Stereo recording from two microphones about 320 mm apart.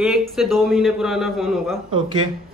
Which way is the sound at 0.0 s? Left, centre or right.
Centre.